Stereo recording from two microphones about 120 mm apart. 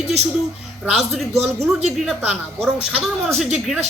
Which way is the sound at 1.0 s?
Centre (ahead or behind).